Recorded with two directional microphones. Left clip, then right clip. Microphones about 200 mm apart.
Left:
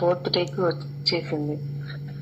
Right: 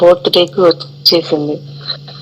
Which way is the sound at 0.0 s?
40° right (ahead or behind).